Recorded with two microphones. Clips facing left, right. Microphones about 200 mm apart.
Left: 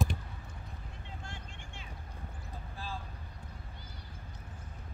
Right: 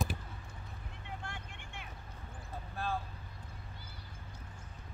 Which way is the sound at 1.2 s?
60° right (ahead or behind).